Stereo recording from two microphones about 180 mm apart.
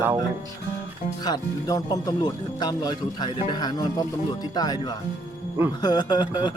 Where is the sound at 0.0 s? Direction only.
10° right (ahead or behind).